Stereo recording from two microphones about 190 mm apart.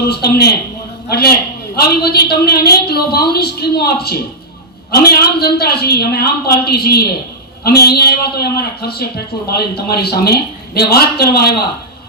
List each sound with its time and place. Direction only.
0.1 s a man's voice: 55° left (ahead or behind)
1.7 s a man's voice: 55° left (ahead or behind)